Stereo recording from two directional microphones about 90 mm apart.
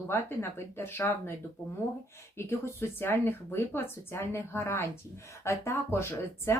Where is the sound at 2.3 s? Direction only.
30° left (ahead or behind).